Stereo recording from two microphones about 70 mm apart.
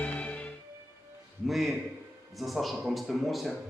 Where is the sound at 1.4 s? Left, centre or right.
Centre.